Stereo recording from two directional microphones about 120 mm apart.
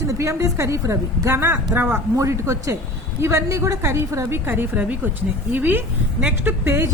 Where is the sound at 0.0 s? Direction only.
25° right (ahead or behind).